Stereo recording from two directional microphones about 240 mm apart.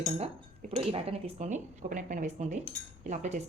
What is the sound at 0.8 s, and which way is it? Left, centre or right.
Speech, right.